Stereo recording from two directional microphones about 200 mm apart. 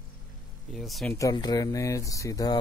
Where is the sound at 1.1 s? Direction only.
20° left (ahead or behind).